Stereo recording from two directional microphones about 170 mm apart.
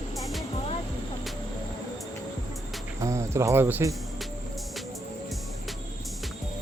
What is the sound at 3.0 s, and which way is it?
Cricket, 20° right (ahead or behind).